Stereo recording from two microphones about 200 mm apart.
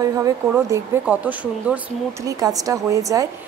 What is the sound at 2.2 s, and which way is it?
A woman's voice, 15° right (ahead or behind).